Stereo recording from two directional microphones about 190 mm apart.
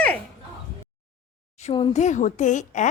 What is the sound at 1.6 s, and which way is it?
Speech, 30° left (ahead or behind).